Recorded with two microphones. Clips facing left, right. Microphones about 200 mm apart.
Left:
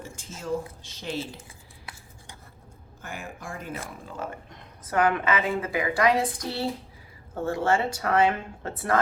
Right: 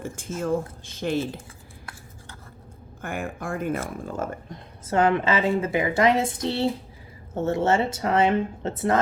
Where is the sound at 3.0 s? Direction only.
55° right (ahead or behind).